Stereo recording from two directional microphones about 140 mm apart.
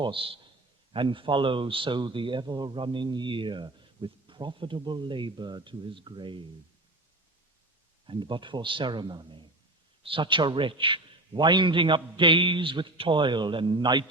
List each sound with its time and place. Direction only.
0.0 s a man's voice: 40° right (ahead or behind)
8.0 s a man's voice: 35° right (ahead or behind)